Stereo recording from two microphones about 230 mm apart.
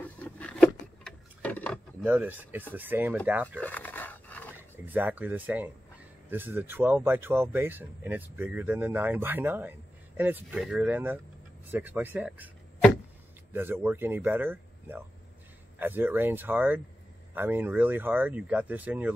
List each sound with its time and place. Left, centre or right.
0.4 s a sound: centre
2.7 s speech: centre
3.6 s dog: centre
4.6 s speech: centre
13.5 s speech: centre